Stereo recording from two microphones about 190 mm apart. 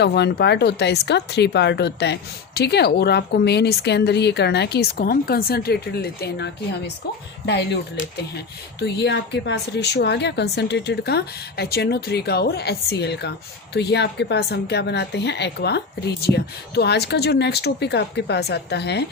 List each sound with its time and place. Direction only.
0.0 s speech: 60° left (ahead or behind)
8.8 s speech: 65° left (ahead or behind)